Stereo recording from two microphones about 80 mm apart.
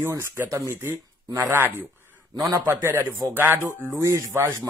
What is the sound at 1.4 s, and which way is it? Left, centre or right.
Speech, right.